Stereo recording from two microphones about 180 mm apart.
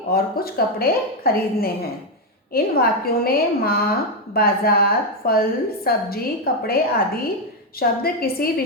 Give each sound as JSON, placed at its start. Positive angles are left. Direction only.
{"t": 0.1, "sound": "a woman's voice", "side_deg": 55}